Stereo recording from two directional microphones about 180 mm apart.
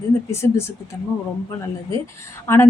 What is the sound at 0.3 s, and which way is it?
Speech, 15° left (ahead or behind).